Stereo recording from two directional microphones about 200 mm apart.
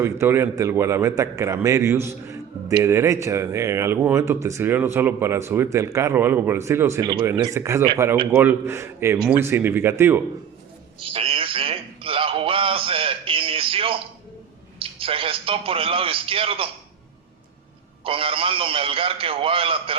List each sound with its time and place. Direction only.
0.0 s a man's voice: 10° right (ahead or behind)
11.0 s a sound: 25° right (ahead or behind)
14.8 s a man's voice: 25° right (ahead or behind)
18.0 s a man's voice: 25° right (ahead or behind)